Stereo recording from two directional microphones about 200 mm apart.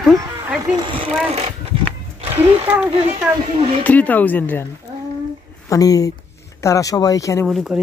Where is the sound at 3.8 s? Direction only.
5° left (ahead or behind).